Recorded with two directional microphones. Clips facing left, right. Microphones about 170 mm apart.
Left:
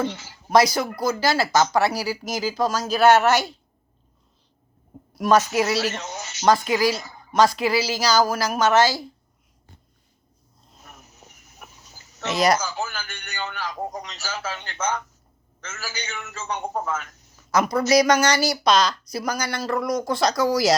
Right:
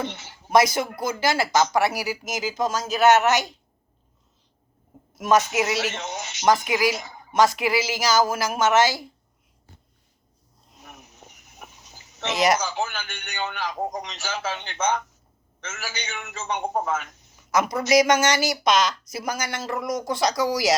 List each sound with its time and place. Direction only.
0.0 s speech: 20° right (ahead or behind)
5.1 s speech: 20° right (ahead or behind)
11.6 s speech: 20° right (ahead or behind)